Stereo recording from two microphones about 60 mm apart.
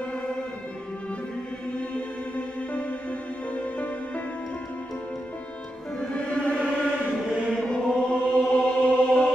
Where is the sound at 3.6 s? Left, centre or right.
Left.